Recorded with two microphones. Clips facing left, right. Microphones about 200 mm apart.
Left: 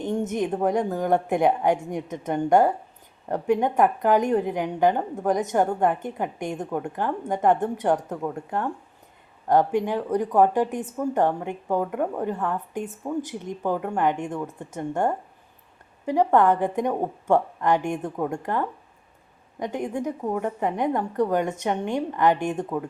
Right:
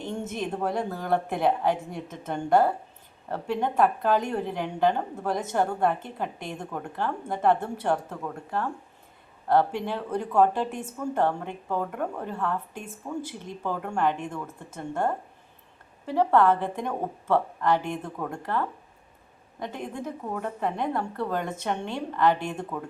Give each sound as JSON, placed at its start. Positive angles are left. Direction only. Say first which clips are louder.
{"t": 0.0, "sound": "a woman's voice", "louder": "left 6 dB", "side_deg": 20}
{"t": 9.5, "sound": "a woman's voice", "louder": "left 3 dB", "side_deg": 15}